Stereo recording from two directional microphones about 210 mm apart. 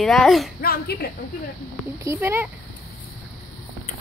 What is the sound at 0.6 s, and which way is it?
Speech, 45° left (ahead or behind).